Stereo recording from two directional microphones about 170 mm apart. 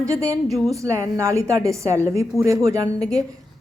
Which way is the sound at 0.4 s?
Centre (ahead or behind).